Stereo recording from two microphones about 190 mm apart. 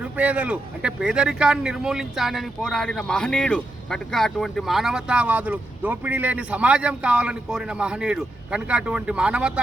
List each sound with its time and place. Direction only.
0.0 s speech: 5° right (ahead or behind)